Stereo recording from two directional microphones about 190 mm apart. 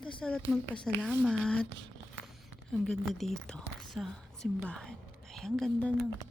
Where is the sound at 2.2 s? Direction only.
Centre (ahead or behind).